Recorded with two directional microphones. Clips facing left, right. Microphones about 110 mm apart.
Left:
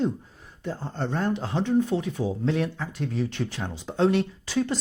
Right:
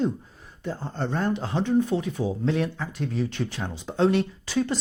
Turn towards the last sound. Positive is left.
turn(degrees=-15)  # may be behind; listen again after turning